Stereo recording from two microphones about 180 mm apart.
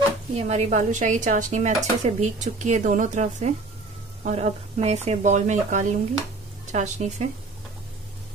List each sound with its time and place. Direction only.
0.4 s speech: 40° right (ahead or behind)